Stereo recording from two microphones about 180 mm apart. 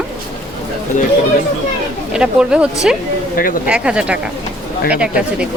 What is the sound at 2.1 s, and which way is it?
A woman's voice, 5° right (ahead or behind).